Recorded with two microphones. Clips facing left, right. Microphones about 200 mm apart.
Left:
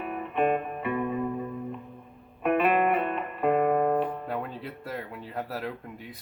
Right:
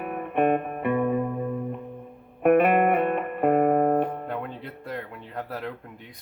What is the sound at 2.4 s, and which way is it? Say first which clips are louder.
Music: right 5 dB; 55° right (ahead or behind).